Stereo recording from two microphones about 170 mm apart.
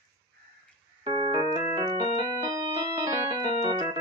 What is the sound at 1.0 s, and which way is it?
Keyboard, 30° right (ahead or behind).